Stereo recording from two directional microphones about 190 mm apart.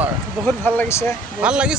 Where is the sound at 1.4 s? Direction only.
5° right (ahead or behind).